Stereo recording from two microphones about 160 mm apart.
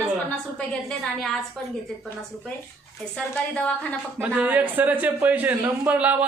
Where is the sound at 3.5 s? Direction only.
10° left (ahead or behind).